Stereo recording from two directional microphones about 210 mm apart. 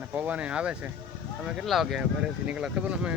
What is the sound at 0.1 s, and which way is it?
Speech, 5° right (ahead or behind).